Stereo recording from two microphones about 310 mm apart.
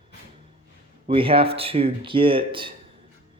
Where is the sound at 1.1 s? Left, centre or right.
Centre.